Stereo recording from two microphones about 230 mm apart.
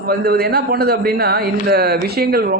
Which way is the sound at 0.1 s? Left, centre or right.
Right.